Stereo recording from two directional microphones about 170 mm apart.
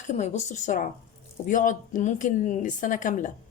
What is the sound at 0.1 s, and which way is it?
Speech, 45° left (ahead or behind).